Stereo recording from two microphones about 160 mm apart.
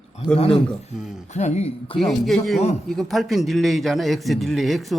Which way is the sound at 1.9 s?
Centre (ahead or behind).